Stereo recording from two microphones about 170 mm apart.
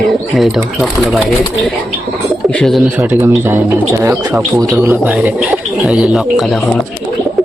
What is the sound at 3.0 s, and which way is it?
Speech, 15° right (ahead or behind).